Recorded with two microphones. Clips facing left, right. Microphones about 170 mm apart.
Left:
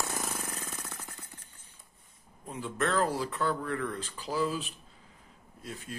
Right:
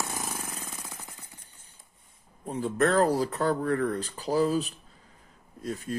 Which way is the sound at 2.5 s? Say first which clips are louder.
Right 6 dB; 40° right (ahead or behind).